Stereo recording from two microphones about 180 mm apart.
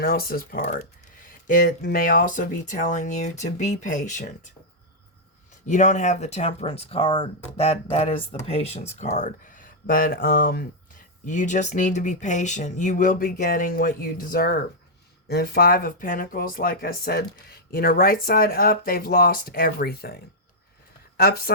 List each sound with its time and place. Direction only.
0.0 s speech: 55° left (ahead or behind)
5.6 s speech: 40° left (ahead or behind)
11.3 s speech: 45° left (ahead or behind)